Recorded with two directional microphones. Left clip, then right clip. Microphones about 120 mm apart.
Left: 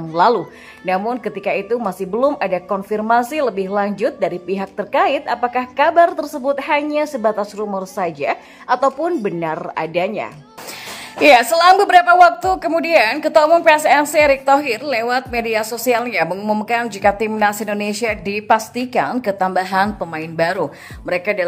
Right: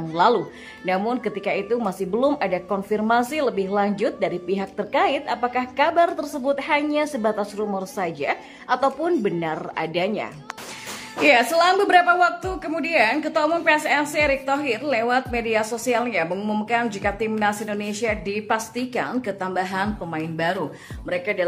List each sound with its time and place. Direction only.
0.1 s a woman's voice: 30° left (ahead or behind)
11.1 s a woman's voice: 55° left (ahead or behind)
16.3 s speech: 35° left (ahead or behind)
16.8 s a woman's voice: 50° left (ahead or behind)